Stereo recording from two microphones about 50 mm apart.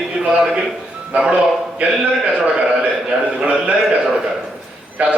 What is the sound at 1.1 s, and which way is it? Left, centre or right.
A man's voice, right.